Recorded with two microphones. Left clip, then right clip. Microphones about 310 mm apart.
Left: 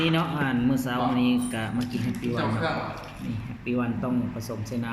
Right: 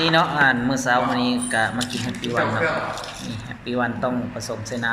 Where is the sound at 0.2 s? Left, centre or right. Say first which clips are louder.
Right 10 dB; right.